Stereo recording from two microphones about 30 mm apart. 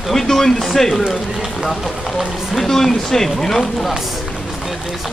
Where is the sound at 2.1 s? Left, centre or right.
Centre.